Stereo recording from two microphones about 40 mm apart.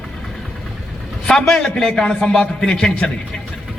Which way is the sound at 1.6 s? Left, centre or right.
Centre.